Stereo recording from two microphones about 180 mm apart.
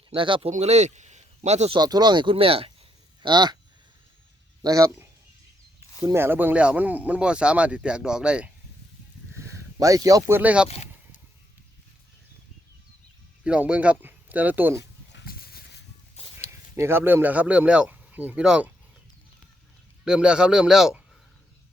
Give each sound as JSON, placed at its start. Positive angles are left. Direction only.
{"t": 0.1, "sound": "speech", "side_deg": -30}
{"t": 0.5, "sound": "speech", "side_deg": -40}
{"t": 1.8, "sound": "speech", "side_deg": -20}
{"t": 4.6, "sound": "speech", "side_deg": -20}
{"t": 9.7, "sound": "speech", "side_deg": -20}
{"t": 13.4, "sound": "speech", "side_deg": -5}
{"t": 14.8, "sound": "a sound", "side_deg": 65}
{"t": 16.2, "sound": "a sound", "side_deg": 35}
{"t": 16.7, "sound": "speech", "side_deg": -15}
{"t": 20.1, "sound": "a man's voice", "side_deg": -5}